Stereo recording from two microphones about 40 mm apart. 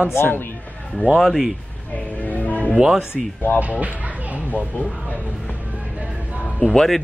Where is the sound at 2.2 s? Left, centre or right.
Left.